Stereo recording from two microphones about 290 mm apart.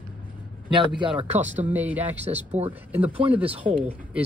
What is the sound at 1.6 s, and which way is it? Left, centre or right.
Speech, centre.